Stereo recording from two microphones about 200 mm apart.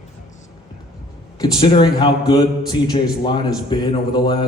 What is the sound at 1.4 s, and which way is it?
A man's voice, 25° left (ahead or behind).